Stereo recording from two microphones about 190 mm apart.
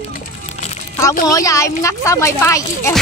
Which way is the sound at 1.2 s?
15° left (ahead or behind).